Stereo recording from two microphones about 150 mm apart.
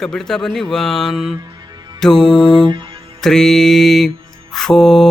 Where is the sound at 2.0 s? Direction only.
5° left (ahead or behind).